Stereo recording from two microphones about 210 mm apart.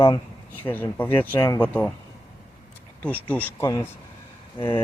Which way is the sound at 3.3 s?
10° left (ahead or behind).